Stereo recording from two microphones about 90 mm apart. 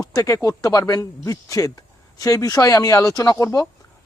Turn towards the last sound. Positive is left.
turn(degrees=40)  # may be behind; listen again after turning